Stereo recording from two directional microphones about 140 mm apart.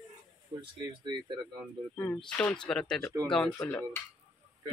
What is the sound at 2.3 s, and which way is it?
Speech, 10° left (ahead or behind).